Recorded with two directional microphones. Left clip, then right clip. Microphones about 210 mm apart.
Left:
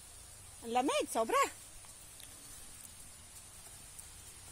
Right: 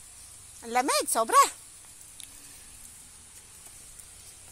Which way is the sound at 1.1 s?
10° right (ahead or behind).